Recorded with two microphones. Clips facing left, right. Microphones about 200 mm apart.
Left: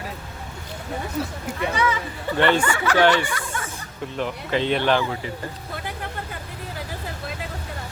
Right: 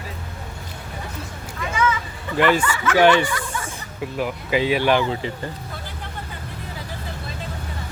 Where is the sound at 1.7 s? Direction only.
35° left (ahead or behind).